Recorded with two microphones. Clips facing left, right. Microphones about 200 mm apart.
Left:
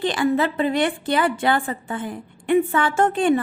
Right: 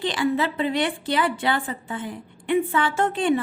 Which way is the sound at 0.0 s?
50° left (ahead or behind).